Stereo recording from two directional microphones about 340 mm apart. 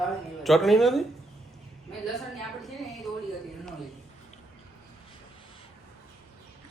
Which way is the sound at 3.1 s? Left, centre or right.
Centre.